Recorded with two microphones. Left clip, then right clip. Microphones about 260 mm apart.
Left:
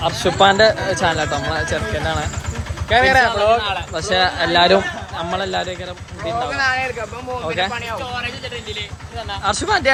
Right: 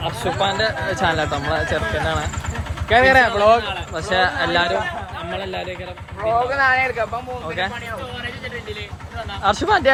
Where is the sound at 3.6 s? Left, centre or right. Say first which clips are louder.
Left 4 dB; centre.